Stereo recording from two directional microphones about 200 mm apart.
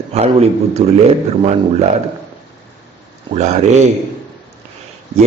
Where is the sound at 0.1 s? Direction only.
30° right (ahead or behind).